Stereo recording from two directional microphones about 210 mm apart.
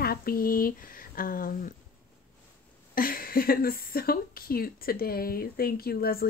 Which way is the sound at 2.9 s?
45° left (ahead or behind).